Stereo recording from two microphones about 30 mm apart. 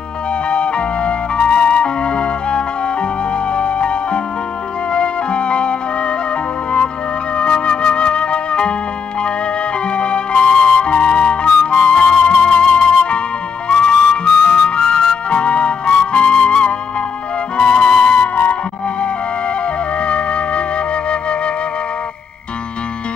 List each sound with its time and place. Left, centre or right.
0.5 s music: left
7.3 s music: left
9.8 s flute: left
12.1 s music: left
14.3 s music: left
17.6 s flute: left
18.2 s music: left
19.6 s flute: left